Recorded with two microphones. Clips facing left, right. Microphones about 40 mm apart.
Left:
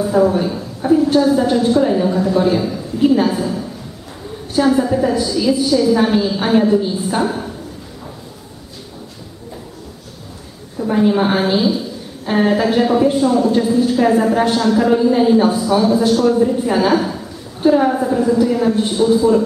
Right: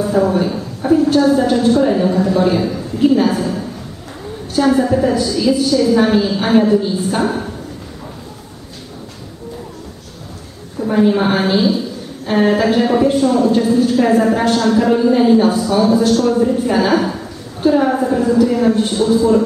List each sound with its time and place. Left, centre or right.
0.0 s a woman's voice: centre
3.2 s a man's voice: centre
4.6 s a woman's voice: centre
5.1 s a man's voice: centre
5.9 s a woman's voice: centre
10.8 s a woman's voice: centre
14.4 s a man's voice: centre
14.7 s a woman's voice: centre
15.5 s a man's voice: centre
16.9 s a woman's voice: centre
18.4 s a woman's voice: centre